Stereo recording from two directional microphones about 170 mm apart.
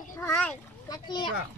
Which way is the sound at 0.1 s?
10° left (ahead or behind).